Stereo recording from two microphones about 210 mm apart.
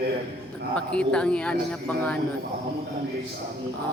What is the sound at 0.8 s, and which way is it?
A man's voice, 5° left (ahead or behind).